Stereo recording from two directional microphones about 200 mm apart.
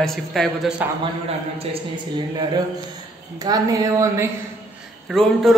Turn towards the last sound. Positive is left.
turn(degrees=0)  # may be behind; listen again after turning